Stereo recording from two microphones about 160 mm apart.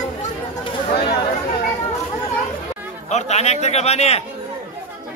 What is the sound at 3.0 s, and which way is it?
A man's voice, 45° left (ahead or behind).